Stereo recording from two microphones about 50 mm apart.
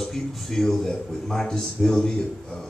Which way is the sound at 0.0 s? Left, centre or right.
Centre.